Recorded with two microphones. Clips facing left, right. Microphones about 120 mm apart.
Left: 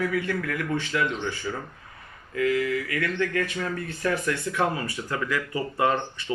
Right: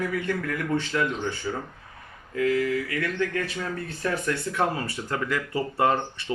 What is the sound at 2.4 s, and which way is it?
Speech, 30° right (ahead or behind).